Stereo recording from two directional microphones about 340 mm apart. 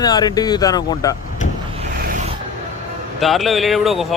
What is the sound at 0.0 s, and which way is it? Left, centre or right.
Speech, centre.